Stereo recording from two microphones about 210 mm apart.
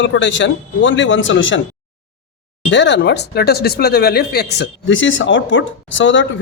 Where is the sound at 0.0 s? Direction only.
60° left (ahead or behind).